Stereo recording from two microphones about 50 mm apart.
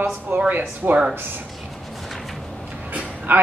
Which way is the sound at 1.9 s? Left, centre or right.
Centre.